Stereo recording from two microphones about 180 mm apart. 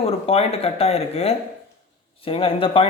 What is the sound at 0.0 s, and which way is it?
Speech, 35° left (ahead or behind).